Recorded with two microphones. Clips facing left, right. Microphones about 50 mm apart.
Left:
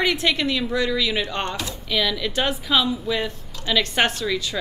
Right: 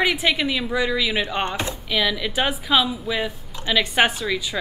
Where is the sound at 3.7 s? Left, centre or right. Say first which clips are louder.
Right 2 dB; centre.